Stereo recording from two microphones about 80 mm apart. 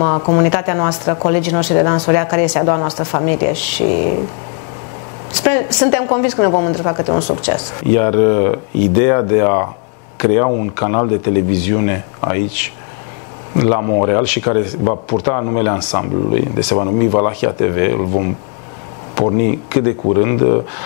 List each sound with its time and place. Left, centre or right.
0.0 s speech: left
5.4 s speech: left
13.6 s speech: left